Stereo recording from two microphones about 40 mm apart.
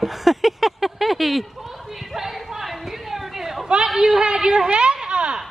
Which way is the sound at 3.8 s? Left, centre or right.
Centre.